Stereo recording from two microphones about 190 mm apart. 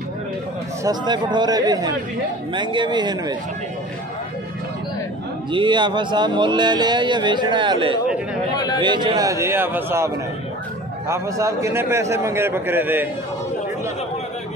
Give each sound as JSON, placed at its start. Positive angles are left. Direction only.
{"t": 0.8, "sound": "speech", "side_deg": -20}
{"t": 5.5, "sound": "a man's voice", "side_deg": -25}